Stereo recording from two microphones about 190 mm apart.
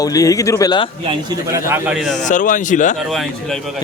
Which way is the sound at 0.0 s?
20° left (ahead or behind).